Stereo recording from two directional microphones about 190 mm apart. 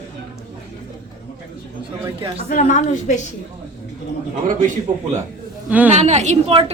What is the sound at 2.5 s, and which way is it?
Speech, 40° left (ahead or behind).